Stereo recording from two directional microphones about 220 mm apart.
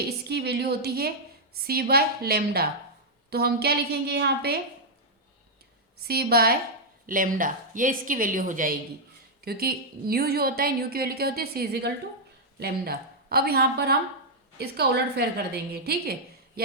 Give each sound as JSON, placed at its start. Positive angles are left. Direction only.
{"t": 0.0, "sound": "a woman's voice", "side_deg": -45}
{"t": 6.0, "sound": "a woman's voice", "side_deg": -45}